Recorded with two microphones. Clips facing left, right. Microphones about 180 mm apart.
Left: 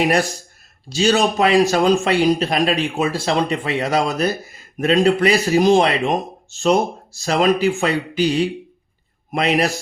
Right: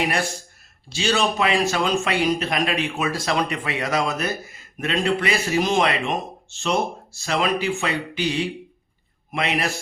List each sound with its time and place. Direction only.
0.1 s speech: 40° left (ahead or behind)